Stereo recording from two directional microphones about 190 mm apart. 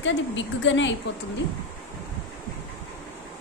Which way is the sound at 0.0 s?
75° left (ahead or behind).